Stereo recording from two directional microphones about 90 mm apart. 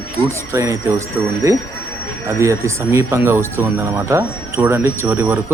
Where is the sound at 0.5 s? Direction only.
35° right (ahead or behind).